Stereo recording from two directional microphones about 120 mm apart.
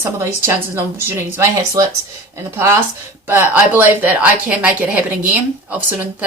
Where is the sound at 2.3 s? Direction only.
25° right (ahead or behind).